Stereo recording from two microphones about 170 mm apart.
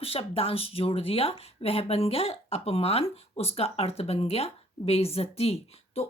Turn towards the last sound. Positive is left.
turn(degrees=35)  # may be behind; listen again after turning